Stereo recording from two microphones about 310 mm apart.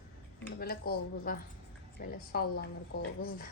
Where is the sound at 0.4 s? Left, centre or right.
Left.